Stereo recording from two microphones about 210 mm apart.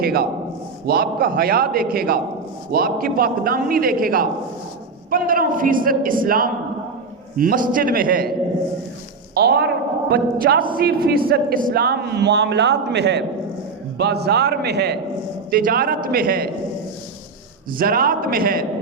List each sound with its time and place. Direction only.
0.0 s a sound: 45° right (ahead or behind)
0.9 s a man's voice: 45° right (ahead or behind)
9.3 s speech: 45° right (ahead or behind)
17.7 s speech: 45° right (ahead or behind)